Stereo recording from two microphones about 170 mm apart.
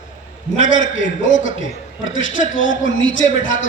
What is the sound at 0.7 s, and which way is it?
A man's voice, 90° left.